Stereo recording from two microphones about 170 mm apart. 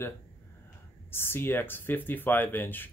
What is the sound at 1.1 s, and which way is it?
Speech, 15° left (ahead or behind).